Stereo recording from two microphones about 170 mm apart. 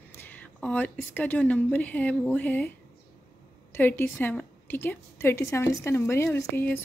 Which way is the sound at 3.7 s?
10° left (ahead or behind).